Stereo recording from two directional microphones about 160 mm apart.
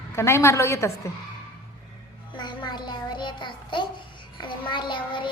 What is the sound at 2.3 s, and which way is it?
Music, 30° left (ahead or behind).